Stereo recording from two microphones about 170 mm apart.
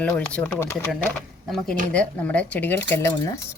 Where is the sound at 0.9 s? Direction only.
Centre (ahead or behind).